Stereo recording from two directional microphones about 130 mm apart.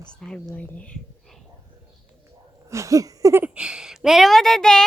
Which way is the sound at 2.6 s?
25° right (ahead or behind).